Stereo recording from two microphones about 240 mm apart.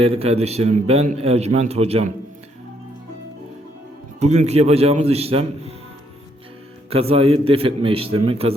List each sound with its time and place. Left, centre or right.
0.0 s a man's voice: right
4.2 s a man's voice: right
6.9 s a man's voice: right